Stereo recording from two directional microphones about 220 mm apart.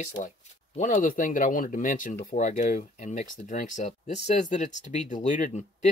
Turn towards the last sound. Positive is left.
turn(degrees=35)  # may be behind; listen again after turning